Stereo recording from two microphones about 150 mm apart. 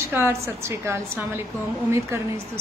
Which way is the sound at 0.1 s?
15° right (ahead or behind).